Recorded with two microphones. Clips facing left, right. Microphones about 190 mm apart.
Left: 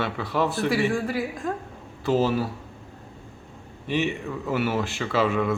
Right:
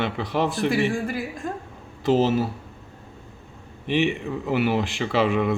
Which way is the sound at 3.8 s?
15° right (ahead or behind).